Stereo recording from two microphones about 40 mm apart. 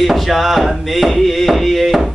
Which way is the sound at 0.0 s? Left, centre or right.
Centre.